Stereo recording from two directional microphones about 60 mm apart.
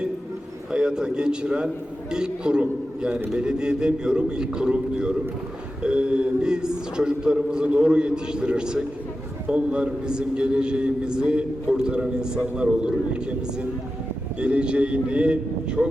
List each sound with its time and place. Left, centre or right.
0.7 s a man's voice: centre